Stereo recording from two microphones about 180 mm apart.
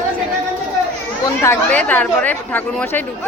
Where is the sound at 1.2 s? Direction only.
15° left (ahead or behind).